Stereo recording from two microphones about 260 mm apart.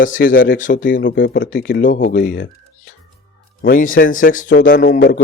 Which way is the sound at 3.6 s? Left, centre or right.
Left.